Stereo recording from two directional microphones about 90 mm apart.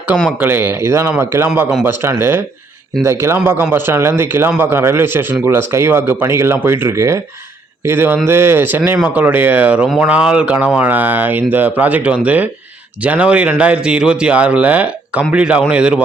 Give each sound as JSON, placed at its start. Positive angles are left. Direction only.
{"t": 0.3, "sound": "a man's voice", "side_deg": -20}